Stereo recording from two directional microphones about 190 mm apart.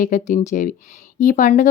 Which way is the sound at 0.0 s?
45° left (ahead or behind).